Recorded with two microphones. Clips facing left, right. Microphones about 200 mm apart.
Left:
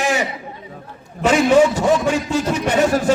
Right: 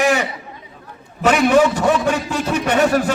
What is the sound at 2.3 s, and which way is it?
Speech, 60° right (ahead or behind).